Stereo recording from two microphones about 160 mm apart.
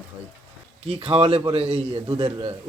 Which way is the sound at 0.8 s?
35° right (ahead or behind).